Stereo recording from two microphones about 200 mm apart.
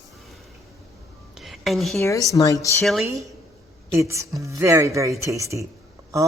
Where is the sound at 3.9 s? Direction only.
15° right (ahead or behind).